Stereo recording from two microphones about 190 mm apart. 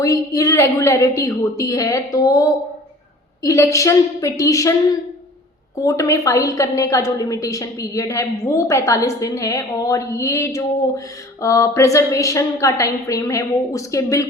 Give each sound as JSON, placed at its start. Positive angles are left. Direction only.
{"t": 0.0, "sound": "a woman's voice", "side_deg": 15}
{"t": 5.8, "sound": "a woman's voice", "side_deg": 15}